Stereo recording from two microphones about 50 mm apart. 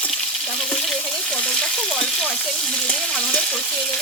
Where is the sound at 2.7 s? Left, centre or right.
Centre.